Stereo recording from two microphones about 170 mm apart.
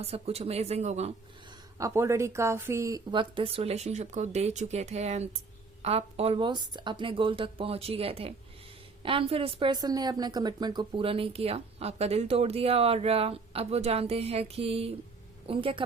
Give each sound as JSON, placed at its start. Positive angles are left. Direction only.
{"t": 0.0, "sound": "a woman's voice", "side_deg": -35}
{"t": 1.8, "sound": "a woman's voice", "side_deg": -15}